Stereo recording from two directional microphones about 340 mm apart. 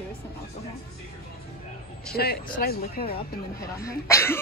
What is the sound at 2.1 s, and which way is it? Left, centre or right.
A woman's voice, left.